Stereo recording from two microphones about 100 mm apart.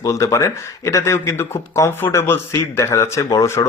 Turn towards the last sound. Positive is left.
turn(degrees=30)  # may be behind; listen again after turning